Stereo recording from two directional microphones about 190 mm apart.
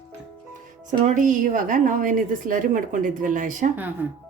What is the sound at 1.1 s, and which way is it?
A woman's voice, 40° right (ahead or behind).